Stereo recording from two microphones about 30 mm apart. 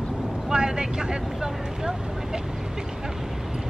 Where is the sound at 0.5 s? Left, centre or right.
Right.